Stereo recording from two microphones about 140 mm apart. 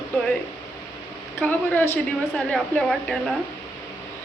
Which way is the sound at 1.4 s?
15° left (ahead or behind).